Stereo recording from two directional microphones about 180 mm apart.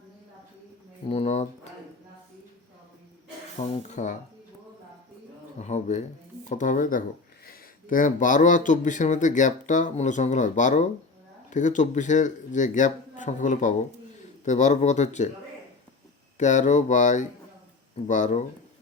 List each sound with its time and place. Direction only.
1.0 s speech: 35° left (ahead or behind)
3.7 s speech: 40° left (ahead or behind)
5.5 s speech: 40° left (ahead or behind)
16.4 s speech: 40° left (ahead or behind)